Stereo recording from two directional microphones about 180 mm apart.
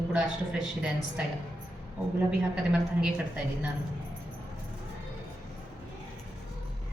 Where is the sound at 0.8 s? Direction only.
5° right (ahead or behind).